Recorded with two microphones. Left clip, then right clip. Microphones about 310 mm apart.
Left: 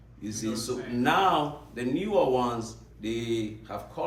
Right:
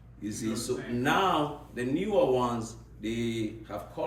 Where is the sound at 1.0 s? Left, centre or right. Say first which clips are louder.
Left 3 dB; centre.